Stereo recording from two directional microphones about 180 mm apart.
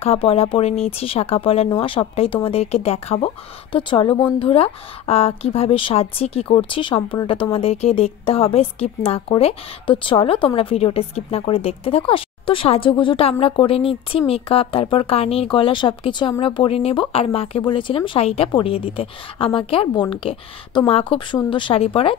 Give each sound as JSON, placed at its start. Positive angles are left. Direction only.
{"t": 0.0, "sound": "speech", "side_deg": 30}